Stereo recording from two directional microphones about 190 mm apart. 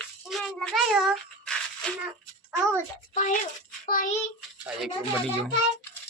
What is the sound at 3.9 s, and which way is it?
Child singing, 45° left (ahead or behind).